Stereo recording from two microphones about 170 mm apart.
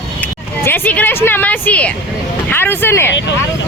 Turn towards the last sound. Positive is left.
turn(degrees=15)  # may be behind; listen again after turning